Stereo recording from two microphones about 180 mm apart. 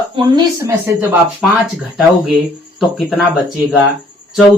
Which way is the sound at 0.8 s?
10° right (ahead or behind).